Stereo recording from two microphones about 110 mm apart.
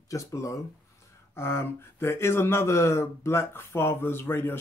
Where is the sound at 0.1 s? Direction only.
30° left (ahead or behind).